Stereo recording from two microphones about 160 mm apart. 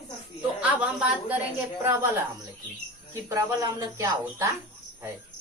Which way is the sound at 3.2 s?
20° right (ahead or behind).